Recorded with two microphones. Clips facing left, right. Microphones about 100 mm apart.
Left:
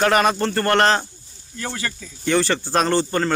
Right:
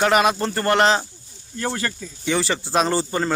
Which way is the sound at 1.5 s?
35° right (ahead or behind).